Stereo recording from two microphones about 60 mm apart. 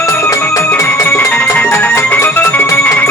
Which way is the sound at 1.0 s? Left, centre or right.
Left.